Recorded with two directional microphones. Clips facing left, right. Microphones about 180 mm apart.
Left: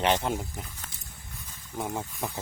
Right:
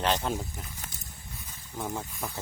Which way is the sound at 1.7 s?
20° left (ahead or behind).